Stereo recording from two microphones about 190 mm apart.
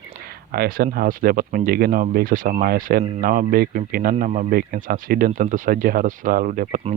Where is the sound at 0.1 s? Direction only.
55° right (ahead or behind).